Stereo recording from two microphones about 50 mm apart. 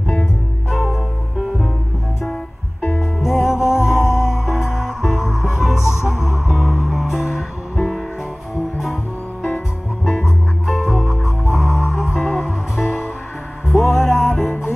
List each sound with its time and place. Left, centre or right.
0.7 s music: centre
3.0 s music: centre
6.6 s music: right
6.9 s music: centre
10.0 s music: centre